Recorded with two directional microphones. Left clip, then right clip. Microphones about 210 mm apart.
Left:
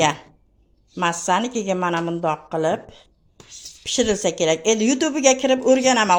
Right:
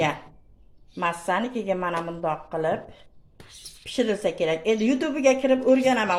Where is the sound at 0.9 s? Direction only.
45° left (ahead or behind).